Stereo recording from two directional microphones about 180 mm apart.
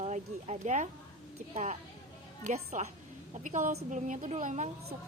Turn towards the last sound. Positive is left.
turn(degrees=-40)  # may be behind; listen again after turning